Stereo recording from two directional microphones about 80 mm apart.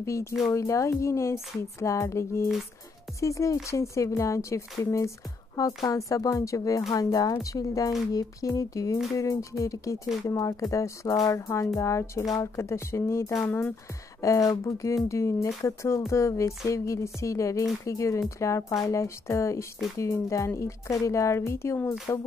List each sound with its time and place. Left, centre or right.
0.0 s speech: left